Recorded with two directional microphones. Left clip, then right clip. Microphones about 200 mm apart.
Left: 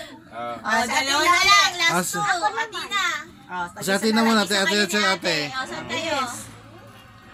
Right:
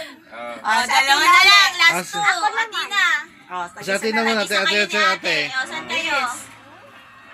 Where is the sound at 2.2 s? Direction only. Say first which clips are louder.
Right 7 dB; 15° right (ahead or behind).